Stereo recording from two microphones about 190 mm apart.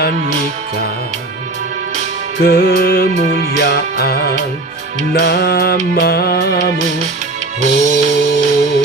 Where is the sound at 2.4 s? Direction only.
55° left (ahead or behind).